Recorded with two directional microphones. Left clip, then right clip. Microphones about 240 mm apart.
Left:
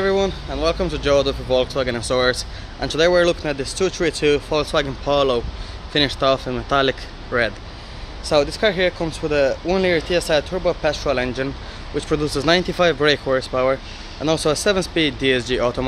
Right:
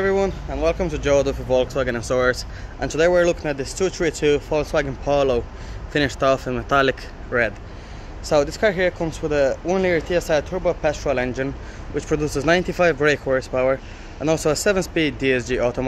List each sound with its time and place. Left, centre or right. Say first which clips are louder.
0.0 s speech: left 1 dB; centre